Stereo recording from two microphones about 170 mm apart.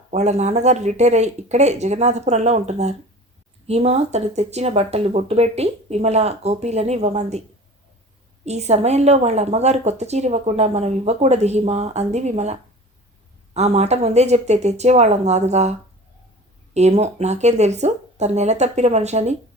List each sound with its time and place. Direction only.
0.1 s a woman's voice: 40° right (ahead or behind)
8.4 s a woman's voice: 40° right (ahead or behind)
16.7 s a woman's voice: 40° right (ahead or behind)